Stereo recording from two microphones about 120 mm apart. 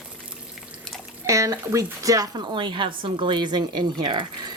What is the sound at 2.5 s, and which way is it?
Speech, 40° right (ahead or behind).